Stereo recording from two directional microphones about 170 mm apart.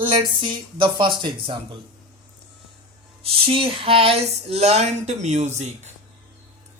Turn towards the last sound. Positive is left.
turn(degrees=-40)  # may be behind; listen again after turning